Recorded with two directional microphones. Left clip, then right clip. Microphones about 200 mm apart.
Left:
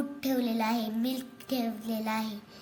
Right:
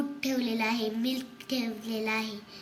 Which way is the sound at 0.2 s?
40° left (ahead or behind).